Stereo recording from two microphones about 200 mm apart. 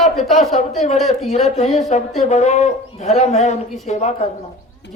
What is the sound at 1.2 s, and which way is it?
Speech, 35° left (ahead or behind).